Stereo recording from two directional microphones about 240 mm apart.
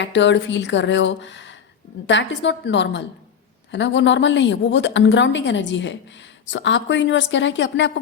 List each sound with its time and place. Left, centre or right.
0.0 s a woman's voice: left